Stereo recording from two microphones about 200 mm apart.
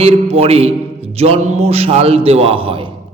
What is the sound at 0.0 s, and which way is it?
A man's voice, 30° right (ahead or behind).